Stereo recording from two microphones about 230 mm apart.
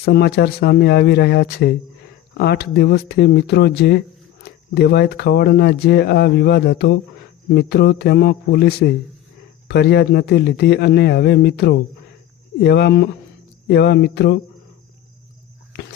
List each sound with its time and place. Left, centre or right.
0.0 s speech: left